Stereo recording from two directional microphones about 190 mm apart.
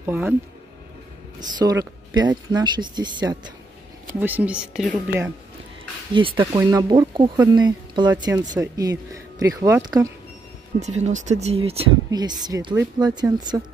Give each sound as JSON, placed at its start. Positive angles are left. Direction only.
{"t": 0.0, "sound": "speech", "side_deg": -10}
{"t": 1.4, "sound": "speech", "side_deg": -20}
{"t": 4.2, "sound": "speech", "side_deg": -10}
{"t": 6.1, "sound": "speech", "side_deg": -25}
{"t": 10.8, "sound": "speech", "side_deg": -35}